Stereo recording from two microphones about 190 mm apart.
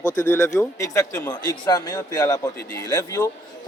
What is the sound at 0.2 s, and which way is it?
A man's voice, 10° left (ahead or behind).